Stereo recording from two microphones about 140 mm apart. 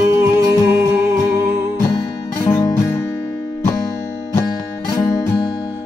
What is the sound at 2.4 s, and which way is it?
Music, 20° left (ahead or behind).